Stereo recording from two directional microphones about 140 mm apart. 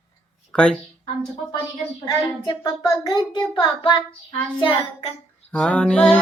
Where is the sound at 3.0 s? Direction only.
35° left (ahead or behind).